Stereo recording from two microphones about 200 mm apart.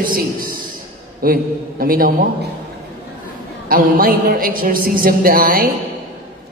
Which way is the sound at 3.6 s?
45° right (ahead or behind).